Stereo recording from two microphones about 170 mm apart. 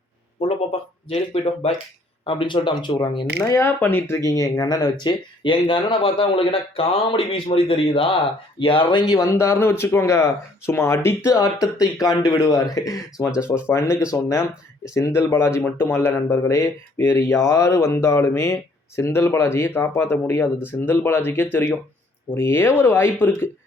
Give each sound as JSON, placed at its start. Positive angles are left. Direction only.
{"t": 0.3, "sound": "speech", "side_deg": 35}
{"t": 3.4, "sound": "speech", "side_deg": 15}